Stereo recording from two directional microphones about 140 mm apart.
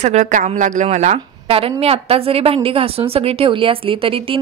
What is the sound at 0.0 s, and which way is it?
Speech, 55° right (ahead or behind).